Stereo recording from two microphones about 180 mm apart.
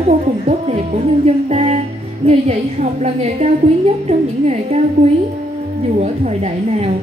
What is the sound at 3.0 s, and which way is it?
A woman's voice, 40° right (ahead or behind).